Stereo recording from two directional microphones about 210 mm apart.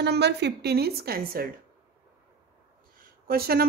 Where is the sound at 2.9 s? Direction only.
45° right (ahead or behind).